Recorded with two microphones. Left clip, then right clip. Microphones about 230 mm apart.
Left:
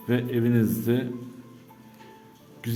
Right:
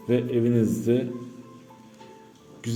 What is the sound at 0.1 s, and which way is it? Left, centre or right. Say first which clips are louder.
Speech: right 2 dB; centre.